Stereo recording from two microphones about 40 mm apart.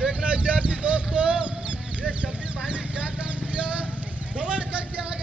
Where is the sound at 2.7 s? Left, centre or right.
Right.